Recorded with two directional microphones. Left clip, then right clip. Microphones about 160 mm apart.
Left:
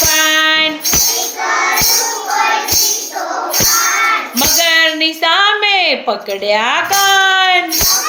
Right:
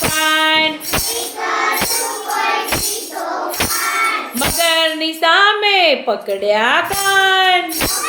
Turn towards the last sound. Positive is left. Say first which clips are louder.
# left 2 dB
turn(degrees=-15)  # may be behind; listen again after turning